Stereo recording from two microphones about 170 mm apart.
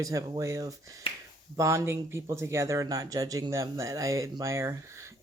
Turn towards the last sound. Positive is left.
turn(degrees=-15)  # may be behind; listen again after turning